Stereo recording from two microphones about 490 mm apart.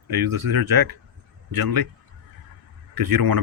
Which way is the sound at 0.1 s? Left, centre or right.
Right.